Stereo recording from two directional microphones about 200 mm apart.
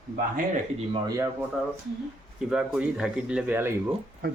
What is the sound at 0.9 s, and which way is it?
Speech, 20° right (ahead or behind).